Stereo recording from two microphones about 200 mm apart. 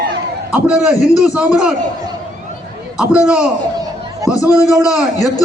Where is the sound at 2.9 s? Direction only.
5° right (ahead or behind).